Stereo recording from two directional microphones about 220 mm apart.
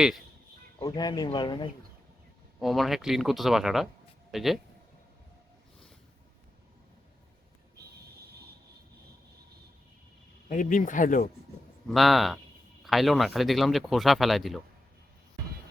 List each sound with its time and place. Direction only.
0.9 s speech: 20° left (ahead or behind)
2.6 s speech: centre (ahead or behind)
10.5 s speech: 35° left (ahead or behind)
11.9 s speech: centre (ahead or behind)